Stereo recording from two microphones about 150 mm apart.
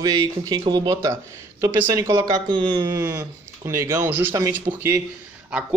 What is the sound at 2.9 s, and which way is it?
Speech, 20° right (ahead or behind).